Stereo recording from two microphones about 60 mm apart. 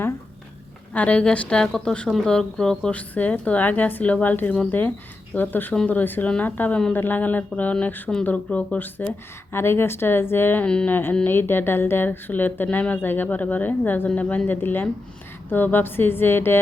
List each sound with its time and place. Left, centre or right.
0.9 s a woman's voice: left
2.9 s speech: left